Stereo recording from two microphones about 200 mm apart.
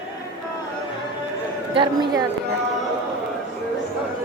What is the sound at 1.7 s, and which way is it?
Speech, 20° right (ahead or behind).